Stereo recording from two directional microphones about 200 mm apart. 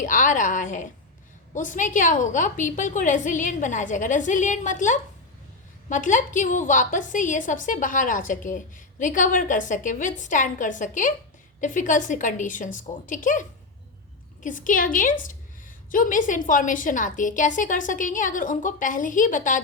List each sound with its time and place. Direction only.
0.0 s a woman's voice: 40° left (ahead or behind)
14.4 s a woman's voice: 40° left (ahead or behind)